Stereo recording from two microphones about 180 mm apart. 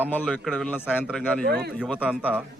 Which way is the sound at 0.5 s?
10° left (ahead or behind).